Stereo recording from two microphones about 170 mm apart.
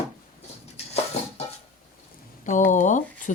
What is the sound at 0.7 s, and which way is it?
Dishes, 40° left (ahead or behind).